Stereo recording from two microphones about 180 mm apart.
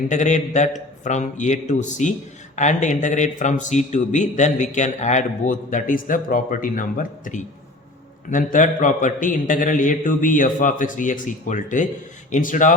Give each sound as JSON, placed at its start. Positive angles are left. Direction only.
{"t": 0.1, "sound": "a man's voice", "side_deg": 40}